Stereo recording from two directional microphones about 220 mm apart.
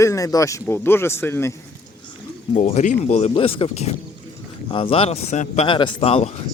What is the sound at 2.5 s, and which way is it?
Speech, 30° left (ahead or behind).